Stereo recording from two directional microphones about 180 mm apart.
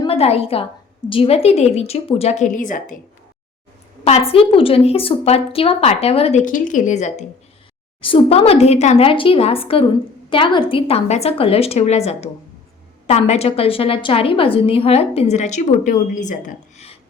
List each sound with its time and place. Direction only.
0.0 s a woman's voice: 35° left (ahead or behind)
4.0 s a woman's voice: 35° left (ahead or behind)